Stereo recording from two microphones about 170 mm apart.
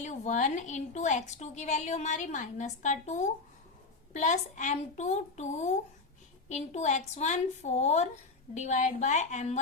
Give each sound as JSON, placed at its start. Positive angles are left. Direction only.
{"t": 0.0, "sound": "a woman's voice", "side_deg": 45}